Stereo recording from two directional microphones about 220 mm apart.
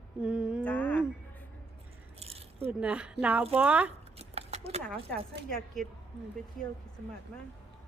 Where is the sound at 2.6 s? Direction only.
5° right (ahead or behind).